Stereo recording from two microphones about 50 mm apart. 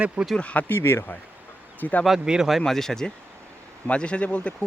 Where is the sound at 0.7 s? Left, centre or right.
Left.